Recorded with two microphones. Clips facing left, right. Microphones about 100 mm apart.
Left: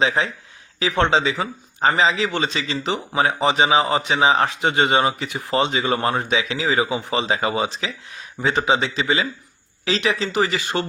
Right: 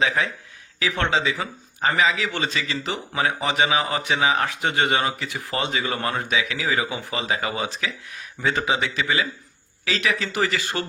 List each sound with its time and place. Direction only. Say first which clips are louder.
0.0 s a man's voice: left 2 dB; 25° left (ahead or behind)